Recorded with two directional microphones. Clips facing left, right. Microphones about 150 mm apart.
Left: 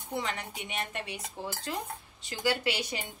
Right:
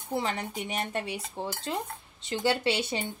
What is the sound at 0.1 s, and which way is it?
A woman's voice, 30° right (ahead or behind).